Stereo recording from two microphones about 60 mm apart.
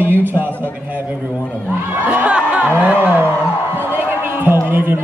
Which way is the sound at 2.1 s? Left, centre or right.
Right.